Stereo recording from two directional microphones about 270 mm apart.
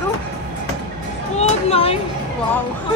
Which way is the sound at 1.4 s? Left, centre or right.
Left.